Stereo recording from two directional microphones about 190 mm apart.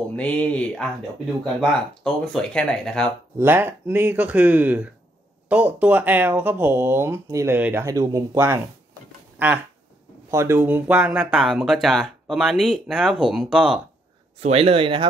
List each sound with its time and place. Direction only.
0.1 s speech: 5° left (ahead or behind)
3.3 s speech: 10° right (ahead or behind)
9.4 s a sound: 10° right (ahead or behind)
10.3 s speech: 15° right (ahead or behind)
14.4 s speech: 30° right (ahead or behind)